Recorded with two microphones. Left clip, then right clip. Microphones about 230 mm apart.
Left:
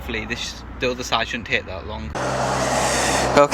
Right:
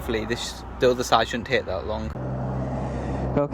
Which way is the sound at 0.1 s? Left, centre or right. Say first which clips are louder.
Left 1 dB; right.